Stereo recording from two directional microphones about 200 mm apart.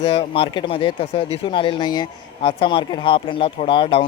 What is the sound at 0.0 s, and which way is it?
Speech, 25° left (ahead or behind).